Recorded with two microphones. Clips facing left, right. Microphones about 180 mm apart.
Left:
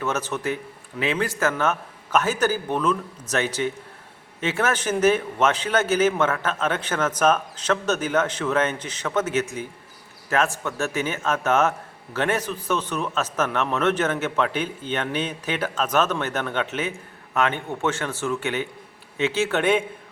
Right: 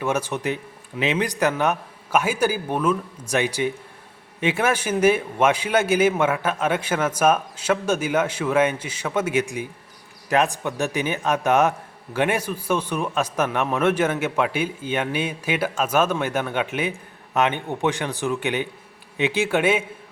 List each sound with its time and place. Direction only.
0.0 s a man's voice: 10° right (ahead or behind)